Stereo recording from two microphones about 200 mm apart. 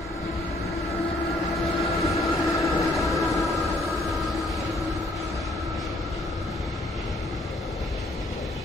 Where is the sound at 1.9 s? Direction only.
15° left (ahead or behind).